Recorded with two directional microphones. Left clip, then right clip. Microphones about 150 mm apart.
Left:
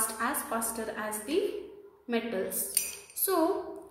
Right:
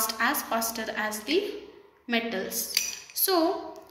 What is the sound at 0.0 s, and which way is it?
A woman's voice, 15° left (ahead or behind).